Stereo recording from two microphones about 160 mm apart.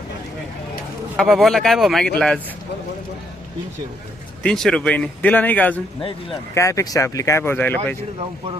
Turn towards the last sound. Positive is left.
turn(degrees=10)  # may be behind; listen again after turning